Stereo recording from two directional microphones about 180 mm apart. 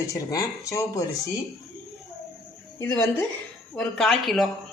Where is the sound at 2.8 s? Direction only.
15° left (ahead or behind).